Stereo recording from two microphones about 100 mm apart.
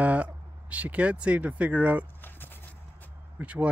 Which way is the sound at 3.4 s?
15° right (ahead or behind).